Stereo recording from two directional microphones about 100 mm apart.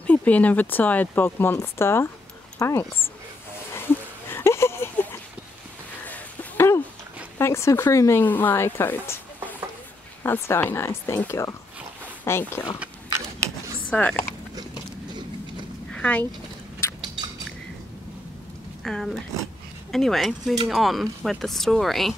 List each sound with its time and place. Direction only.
0.0 s speech: 15° left (ahead or behind)
3.7 s a sound: 20° left (ahead or behind)
7.3 s speech: 25° left (ahead or behind)
13.8 s speech: 15° left (ahead or behind)
15.9 s a sound: 10° left (ahead or behind)
18.9 s speech: 5° left (ahead or behind)